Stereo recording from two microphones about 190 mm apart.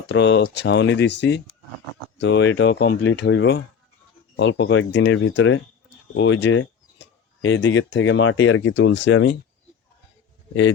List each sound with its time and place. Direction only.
0.1 s speech: 65° left (ahead or behind)
10.5 s a man's voice: 80° left